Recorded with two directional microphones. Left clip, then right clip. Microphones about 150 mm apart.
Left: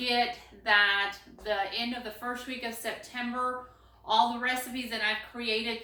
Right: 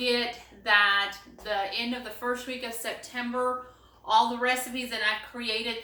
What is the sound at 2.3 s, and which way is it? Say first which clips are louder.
A woman's voice: right 3 dB; 20° right (ahead or behind).